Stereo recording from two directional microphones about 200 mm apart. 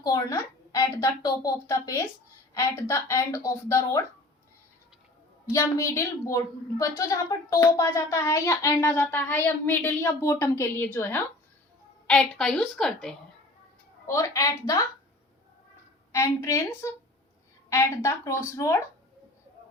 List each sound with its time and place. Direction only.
0.0 s a woman's voice: 20° left (ahead or behind)
5.5 s a woman's voice: 15° left (ahead or behind)
14.1 s a woman's voice: 15° left (ahead or behind)
16.1 s a woman's voice: 15° left (ahead or behind)